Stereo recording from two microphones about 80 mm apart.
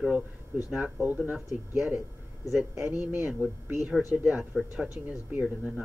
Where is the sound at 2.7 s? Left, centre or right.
Right.